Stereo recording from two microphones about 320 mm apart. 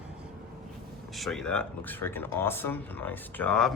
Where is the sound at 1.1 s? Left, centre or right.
Centre.